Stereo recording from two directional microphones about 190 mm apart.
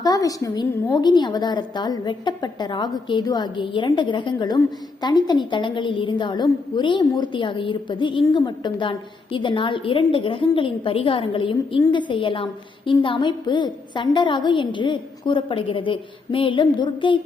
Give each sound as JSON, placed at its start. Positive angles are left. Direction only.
{"t": 0.0, "sound": "a woman's voice", "side_deg": 20}